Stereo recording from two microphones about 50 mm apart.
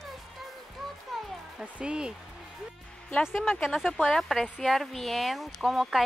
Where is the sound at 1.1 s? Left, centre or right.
Centre.